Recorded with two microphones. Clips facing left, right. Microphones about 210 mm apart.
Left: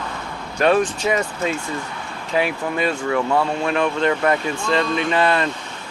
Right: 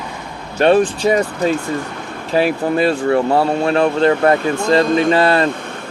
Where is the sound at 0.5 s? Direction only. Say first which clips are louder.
Right 5 dB; 30° right (ahead or behind).